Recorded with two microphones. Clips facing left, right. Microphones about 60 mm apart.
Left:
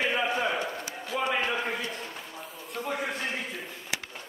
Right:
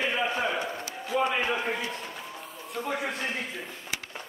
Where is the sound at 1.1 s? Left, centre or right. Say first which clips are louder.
Right 4 dB; centre.